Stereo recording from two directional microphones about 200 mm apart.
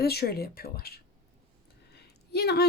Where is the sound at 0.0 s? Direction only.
50° left (ahead or behind).